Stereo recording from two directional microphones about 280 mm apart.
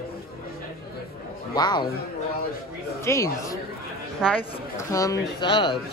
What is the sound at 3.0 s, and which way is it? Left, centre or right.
Speech, centre.